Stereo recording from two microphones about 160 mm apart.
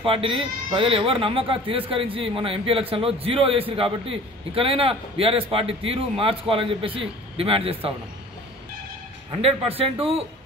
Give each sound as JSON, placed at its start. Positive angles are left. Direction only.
{"t": 0.0, "sound": "speech", "side_deg": -35}
{"t": 9.3, "sound": "speech", "side_deg": -35}